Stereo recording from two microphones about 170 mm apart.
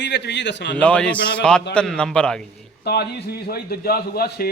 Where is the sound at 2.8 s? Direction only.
75° left (ahead or behind).